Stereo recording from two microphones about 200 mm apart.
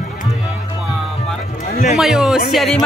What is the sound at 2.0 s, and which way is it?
Speech, 5° right (ahead or behind).